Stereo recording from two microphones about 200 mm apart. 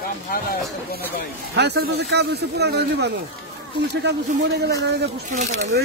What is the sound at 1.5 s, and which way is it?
A man's voice, 55° right (ahead or behind).